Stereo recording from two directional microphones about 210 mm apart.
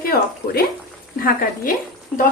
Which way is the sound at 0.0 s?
45° left (ahead or behind).